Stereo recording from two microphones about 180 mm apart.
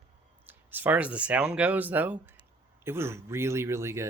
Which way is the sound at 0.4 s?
10° right (ahead or behind).